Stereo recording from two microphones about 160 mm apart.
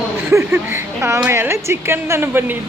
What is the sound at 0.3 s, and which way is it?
Speech, 15° right (ahead or behind).